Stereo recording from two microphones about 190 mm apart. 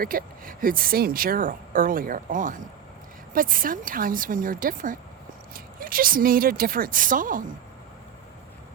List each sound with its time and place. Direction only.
0.0 s speech: 50° right (ahead or behind)